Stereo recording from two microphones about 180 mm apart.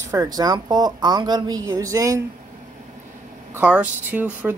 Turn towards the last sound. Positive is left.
turn(degrees=-10)  # may be behind; listen again after turning